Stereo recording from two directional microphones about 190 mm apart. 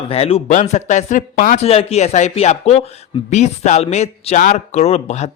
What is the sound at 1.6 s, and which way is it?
A man's voice, 30° left (ahead or behind).